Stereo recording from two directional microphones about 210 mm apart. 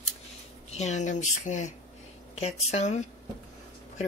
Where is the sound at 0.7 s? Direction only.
35° left (ahead or behind).